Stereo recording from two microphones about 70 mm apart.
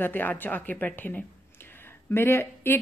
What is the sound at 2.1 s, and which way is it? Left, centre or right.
Speech, left.